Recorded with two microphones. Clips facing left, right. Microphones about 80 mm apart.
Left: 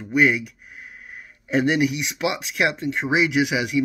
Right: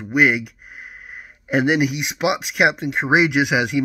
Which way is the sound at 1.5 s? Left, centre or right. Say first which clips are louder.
Right 2 dB; right.